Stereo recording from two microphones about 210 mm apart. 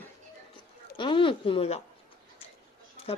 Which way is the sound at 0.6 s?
25° left (ahead or behind).